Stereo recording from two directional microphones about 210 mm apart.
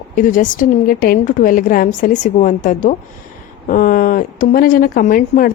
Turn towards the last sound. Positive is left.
turn(degrees=40)  # may be behind; listen again after turning